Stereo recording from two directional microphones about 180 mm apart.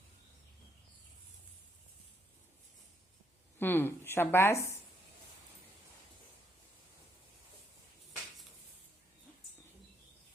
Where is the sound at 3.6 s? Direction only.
10° left (ahead or behind).